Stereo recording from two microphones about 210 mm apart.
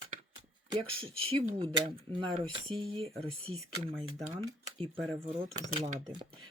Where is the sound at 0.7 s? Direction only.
25° right (ahead or behind).